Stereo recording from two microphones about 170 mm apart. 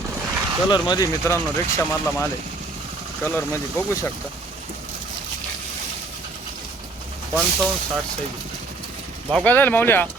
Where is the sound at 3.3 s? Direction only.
10° left (ahead or behind).